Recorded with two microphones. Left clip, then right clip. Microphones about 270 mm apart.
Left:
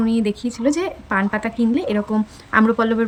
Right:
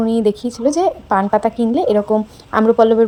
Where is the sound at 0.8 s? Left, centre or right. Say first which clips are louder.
Right 6 dB; centre.